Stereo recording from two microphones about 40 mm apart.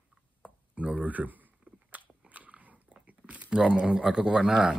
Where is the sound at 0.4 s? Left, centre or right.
Right.